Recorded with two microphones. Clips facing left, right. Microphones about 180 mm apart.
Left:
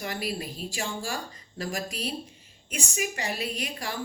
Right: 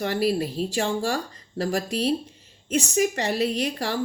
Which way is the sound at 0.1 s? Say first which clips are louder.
Right 9 dB; 35° right (ahead or behind).